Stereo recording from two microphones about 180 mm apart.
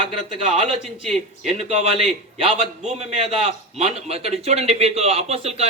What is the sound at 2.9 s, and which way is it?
A man's voice, 40° right (ahead or behind).